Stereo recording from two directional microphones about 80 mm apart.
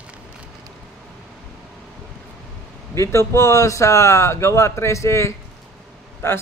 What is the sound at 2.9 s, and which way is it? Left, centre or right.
A man's voice, left.